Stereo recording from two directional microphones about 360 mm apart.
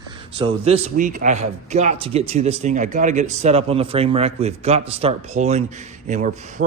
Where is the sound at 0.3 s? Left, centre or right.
Centre.